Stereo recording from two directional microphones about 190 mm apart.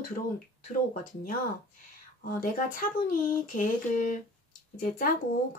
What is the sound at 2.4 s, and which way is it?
Speech, 45° left (ahead or behind).